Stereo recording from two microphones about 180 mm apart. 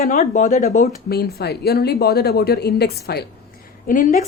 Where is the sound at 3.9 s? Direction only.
50° left (ahead or behind).